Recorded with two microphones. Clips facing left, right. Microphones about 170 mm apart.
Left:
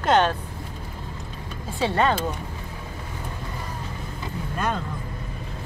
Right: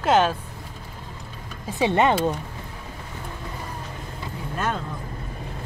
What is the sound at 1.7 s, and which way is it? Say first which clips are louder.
Speech: right 2 dB; 20° right (ahead or behind).